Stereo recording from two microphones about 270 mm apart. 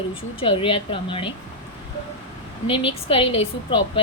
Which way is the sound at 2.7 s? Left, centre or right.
Centre.